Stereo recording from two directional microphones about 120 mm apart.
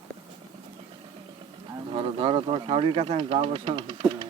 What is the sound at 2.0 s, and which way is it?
Speech, 45° right (ahead or behind).